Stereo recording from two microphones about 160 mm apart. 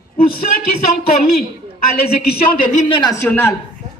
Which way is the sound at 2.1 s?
60° left (ahead or behind).